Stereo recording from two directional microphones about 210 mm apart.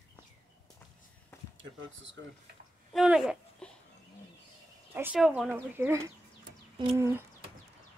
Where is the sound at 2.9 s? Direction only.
Centre (ahead or behind).